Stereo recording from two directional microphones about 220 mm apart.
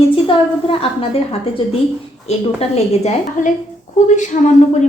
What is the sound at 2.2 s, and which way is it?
A woman's voice, 30° left (ahead or behind).